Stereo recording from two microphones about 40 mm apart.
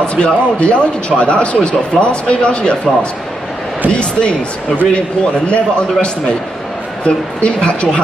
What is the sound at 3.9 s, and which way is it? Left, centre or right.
Speech, left.